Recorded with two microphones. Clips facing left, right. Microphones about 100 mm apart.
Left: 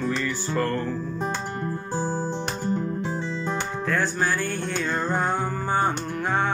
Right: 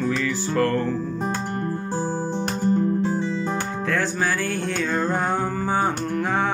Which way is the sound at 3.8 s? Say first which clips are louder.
Even; 90° right.